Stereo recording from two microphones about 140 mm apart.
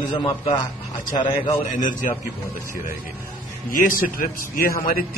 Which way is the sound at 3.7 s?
80° left.